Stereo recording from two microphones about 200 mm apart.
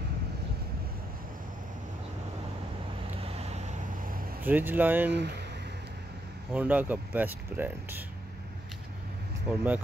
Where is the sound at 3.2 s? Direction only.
30° right (ahead or behind).